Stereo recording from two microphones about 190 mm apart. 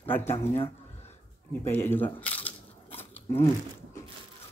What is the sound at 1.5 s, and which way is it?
Speech, 10° left (ahead or behind).